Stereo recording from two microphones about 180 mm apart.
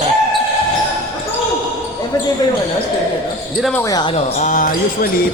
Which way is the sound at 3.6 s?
Centre (ahead or behind).